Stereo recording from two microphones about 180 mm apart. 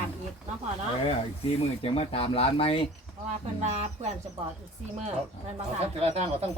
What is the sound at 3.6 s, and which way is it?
Speech, 40° right (ahead or behind).